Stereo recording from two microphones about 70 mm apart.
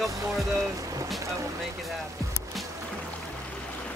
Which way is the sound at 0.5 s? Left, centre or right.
Right.